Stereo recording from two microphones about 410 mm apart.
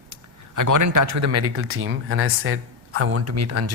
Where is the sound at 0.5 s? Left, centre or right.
Right.